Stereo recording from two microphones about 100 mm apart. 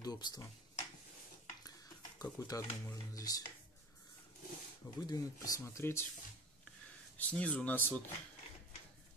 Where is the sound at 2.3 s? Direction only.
35° left (ahead or behind).